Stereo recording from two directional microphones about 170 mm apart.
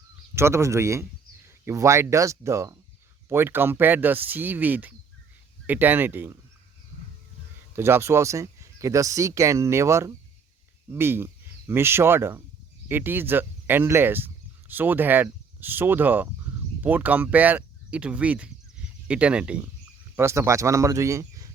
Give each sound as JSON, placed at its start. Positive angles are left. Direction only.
{"t": 0.3, "sound": "speech", "side_deg": -15}
{"t": 7.8, "sound": "speech", "side_deg": -15}